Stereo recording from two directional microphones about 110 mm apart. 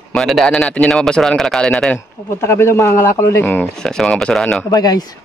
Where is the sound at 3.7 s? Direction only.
5° left (ahead or behind).